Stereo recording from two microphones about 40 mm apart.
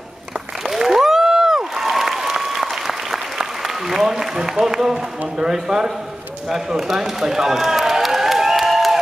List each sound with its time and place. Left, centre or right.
0.7 s applause: centre
4.6 s speech: centre
6.5 s run: centre